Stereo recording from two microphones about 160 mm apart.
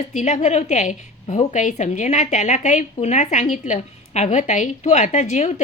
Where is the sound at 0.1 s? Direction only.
50° left (ahead or behind).